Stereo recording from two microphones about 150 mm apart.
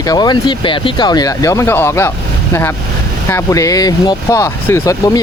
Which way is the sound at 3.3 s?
20° left (ahead or behind).